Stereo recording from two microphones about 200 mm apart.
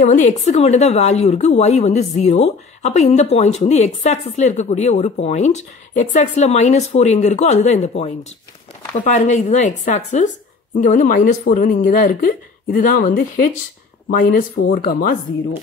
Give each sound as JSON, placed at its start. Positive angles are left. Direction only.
{"t": 0.0, "sound": "a woman's voice", "side_deg": 35}
{"t": 8.9, "sound": "a woman's voice", "side_deg": 35}